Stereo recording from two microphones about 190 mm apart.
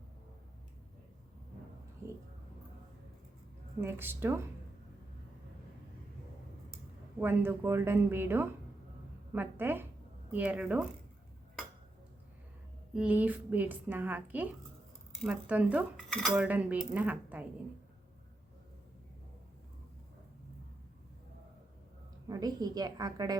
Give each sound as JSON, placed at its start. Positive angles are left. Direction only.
{"t": 3.8, "sound": "a woman's voice", "side_deg": -10}
{"t": 7.2, "sound": "a woman's voice", "side_deg": -10}
{"t": 12.9, "sound": "a woman's voice", "side_deg": -5}
{"t": 22.3, "sound": "a woman's voice", "side_deg": -20}